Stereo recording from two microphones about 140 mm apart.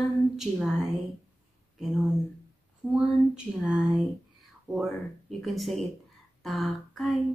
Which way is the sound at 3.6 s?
5° right (ahead or behind).